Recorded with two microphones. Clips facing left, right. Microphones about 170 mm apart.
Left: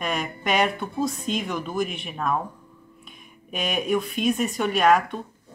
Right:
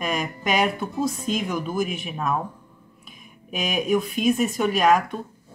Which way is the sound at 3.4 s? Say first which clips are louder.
Right 1 dB; 5° right (ahead or behind).